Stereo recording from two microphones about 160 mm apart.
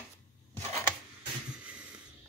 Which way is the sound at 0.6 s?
15° left (ahead or behind).